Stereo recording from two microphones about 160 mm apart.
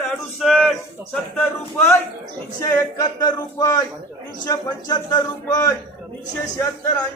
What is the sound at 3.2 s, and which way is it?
Speech, 25° left (ahead or behind).